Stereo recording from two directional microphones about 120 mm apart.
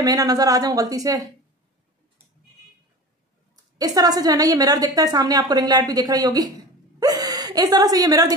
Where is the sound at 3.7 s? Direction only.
30° right (ahead or behind).